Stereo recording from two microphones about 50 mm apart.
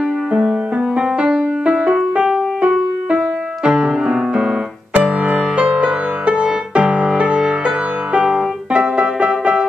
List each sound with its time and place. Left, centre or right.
0.3 s music: right